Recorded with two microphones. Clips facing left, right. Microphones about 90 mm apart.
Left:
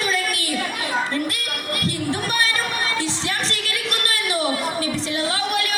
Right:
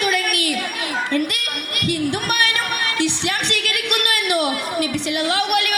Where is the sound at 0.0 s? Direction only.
25° left (ahead or behind).